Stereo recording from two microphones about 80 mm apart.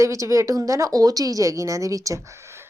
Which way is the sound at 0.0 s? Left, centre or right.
Right.